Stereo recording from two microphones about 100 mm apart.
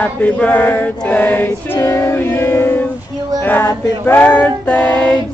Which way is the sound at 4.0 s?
15° left (ahead or behind).